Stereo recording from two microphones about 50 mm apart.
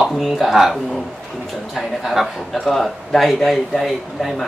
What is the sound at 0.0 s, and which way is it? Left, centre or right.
Speech, centre.